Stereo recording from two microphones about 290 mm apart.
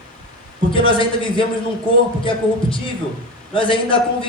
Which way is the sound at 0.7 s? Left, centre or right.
Centre.